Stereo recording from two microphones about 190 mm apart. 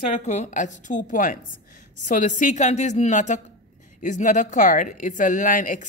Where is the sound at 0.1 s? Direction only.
35° left (ahead or behind).